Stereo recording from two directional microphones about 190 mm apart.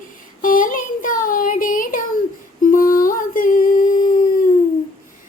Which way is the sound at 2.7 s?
45° left (ahead or behind).